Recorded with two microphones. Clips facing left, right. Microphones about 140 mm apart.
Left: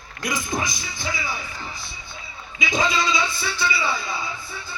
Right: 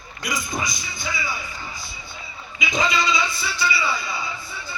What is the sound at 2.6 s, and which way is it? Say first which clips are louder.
A man's voice: even; centre (ahead or behind).